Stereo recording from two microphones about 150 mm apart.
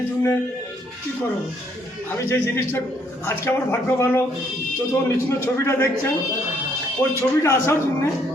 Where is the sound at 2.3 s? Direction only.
15° left (ahead or behind).